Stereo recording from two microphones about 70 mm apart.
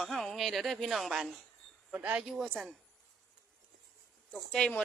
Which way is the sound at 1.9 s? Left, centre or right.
Centre.